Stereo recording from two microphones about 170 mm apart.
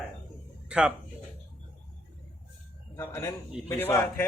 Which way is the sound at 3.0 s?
15° left (ahead or behind).